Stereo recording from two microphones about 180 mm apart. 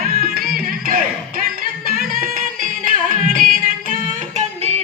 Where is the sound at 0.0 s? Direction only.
55° right (ahead or behind).